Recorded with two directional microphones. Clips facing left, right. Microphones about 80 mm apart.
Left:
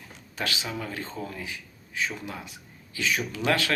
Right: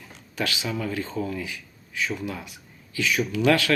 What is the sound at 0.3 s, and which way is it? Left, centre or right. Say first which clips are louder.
Speech: right 3 dB; left.